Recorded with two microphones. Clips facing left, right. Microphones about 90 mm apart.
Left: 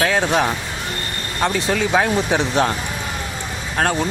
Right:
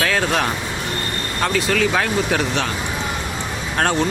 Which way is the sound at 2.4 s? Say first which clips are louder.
Left 3 dB; 35° left (ahead or behind).